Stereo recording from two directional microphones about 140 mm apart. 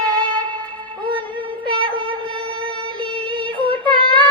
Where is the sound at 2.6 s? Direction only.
40° right (ahead or behind).